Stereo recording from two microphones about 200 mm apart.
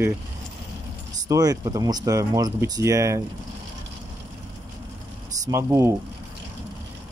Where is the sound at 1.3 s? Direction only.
20° right (ahead or behind).